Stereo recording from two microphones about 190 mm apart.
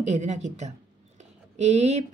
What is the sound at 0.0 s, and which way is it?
A woman's voice, 35° right (ahead or behind).